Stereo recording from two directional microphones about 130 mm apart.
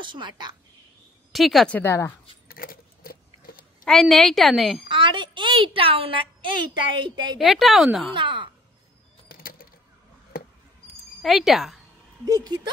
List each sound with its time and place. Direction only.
0.0 s a woman's voice: 35° right (ahead or behind)
1.3 s a woman's voice: centre (ahead or behind)
1.8 s a woman's voice: 20° left (ahead or behind)
2.5 s keys jangling: 90° left
3.8 s a woman's voice: centre (ahead or behind)
4.8 s a sound: 40° right (ahead or behind)
6.9 s a woman's voice: 40° right (ahead or behind)
7.3 s a woman's voice: centre (ahead or behind)
8.1 s a woman's voice: 40° right (ahead or behind)
9.3 s bird: 90° left
11.2 s a woman's voice: centre (ahead or behind)
12.3 s speech: 30° right (ahead or behind)